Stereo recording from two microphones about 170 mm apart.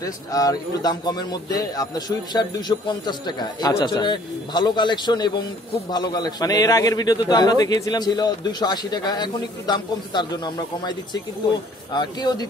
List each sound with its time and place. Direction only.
0.0 s a man's voice: 20° left (ahead or behind)